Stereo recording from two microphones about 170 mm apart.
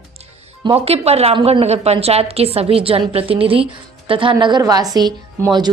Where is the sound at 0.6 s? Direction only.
35° right (ahead or behind).